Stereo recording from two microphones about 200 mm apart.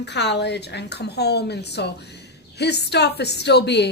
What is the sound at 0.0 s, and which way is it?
Speech, 60° left (ahead or behind).